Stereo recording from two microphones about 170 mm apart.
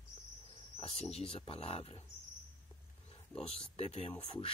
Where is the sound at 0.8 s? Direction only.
35° left (ahead or behind).